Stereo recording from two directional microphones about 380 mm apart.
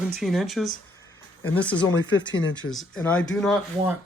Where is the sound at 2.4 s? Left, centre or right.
Left.